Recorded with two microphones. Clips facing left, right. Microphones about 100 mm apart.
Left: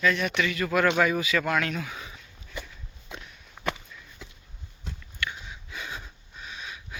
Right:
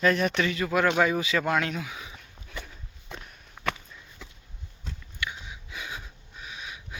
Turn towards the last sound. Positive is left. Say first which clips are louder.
# even
turn(degrees=-15)  # may be behind; listen again after turning